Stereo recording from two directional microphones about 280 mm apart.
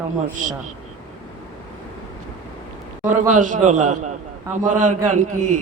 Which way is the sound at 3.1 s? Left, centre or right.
Right.